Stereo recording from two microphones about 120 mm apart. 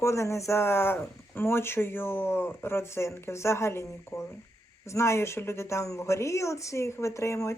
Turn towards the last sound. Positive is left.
turn(degrees=25)  # may be behind; listen again after turning